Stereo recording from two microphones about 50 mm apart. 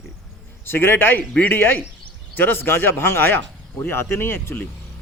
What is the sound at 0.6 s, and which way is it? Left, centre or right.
Speech, left.